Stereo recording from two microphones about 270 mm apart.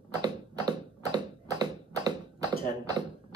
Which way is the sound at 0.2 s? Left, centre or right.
Centre.